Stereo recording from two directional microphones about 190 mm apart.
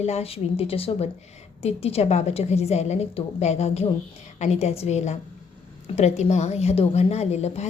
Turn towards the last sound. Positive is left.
turn(degrees=35)  # may be behind; listen again after turning